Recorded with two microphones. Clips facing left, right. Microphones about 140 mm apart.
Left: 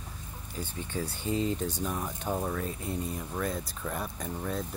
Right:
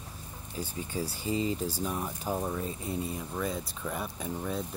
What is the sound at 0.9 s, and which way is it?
Speech, 5° right (ahead or behind).